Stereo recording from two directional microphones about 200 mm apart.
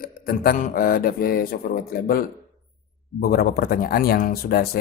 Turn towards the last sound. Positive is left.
turn(degrees=50)  # may be behind; listen again after turning